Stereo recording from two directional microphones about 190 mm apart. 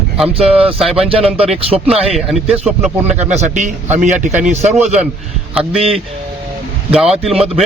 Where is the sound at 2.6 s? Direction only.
35° right (ahead or behind).